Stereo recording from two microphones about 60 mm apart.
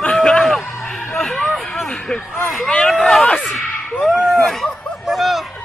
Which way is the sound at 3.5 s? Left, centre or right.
Centre.